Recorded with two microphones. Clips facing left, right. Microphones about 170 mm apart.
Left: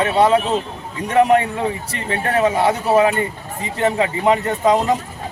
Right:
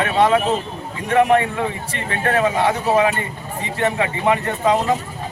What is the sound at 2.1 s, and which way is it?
Speech, 30° left (ahead or behind).